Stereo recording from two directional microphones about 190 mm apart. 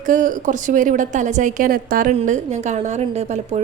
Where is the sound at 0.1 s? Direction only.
45° right (ahead or behind).